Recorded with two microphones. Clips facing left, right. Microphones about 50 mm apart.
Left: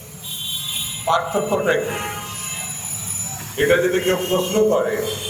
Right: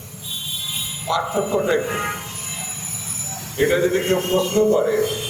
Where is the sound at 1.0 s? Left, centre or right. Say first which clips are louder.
Left 3 dB; left.